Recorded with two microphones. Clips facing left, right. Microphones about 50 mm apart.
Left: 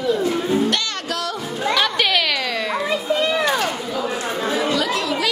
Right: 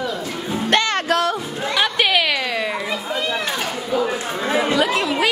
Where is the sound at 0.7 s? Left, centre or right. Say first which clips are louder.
Right 6 dB; right.